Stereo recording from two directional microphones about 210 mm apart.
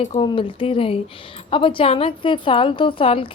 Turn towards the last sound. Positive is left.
turn(degrees=25)  # may be behind; listen again after turning